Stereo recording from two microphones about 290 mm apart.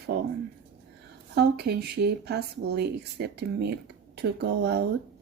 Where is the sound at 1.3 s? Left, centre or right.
Right.